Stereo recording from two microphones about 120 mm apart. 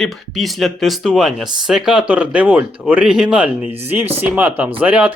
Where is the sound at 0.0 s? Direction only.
Centre (ahead or behind).